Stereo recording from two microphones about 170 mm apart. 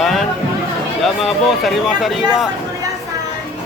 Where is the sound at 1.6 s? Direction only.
Centre (ahead or behind).